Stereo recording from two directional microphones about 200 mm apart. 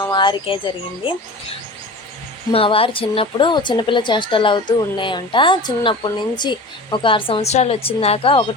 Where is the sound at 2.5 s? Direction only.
30° left (ahead or behind).